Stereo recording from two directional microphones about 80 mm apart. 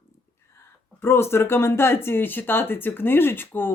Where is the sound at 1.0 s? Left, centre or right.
Left.